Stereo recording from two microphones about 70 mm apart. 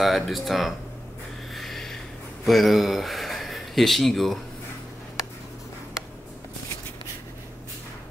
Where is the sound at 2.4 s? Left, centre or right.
Centre.